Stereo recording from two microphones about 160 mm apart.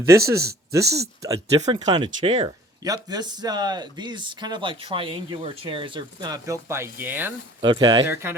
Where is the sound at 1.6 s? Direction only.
45° right (ahead or behind).